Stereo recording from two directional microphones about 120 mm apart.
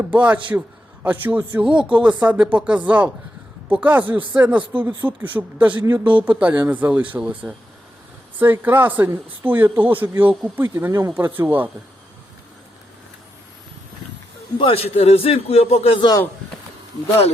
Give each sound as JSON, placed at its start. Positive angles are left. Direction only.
{"t": 0.0, "sound": "speech", "side_deg": -10}
{"t": 14.6, "sound": "a man's voice", "side_deg": 55}